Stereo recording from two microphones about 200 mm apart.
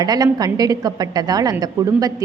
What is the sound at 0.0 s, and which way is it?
A woman's voice, 20° right (ahead or behind).